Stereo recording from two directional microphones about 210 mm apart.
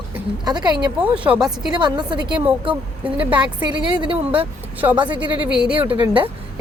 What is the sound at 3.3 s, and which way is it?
Speech, 5° right (ahead or behind).